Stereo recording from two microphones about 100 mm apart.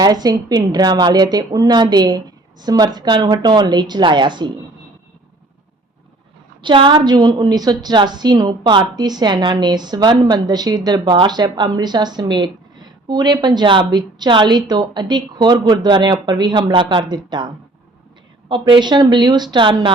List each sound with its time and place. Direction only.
0.0 s a woman's voice: 40° right (ahead or behind)
6.6 s a woman's voice: 55° right (ahead or behind)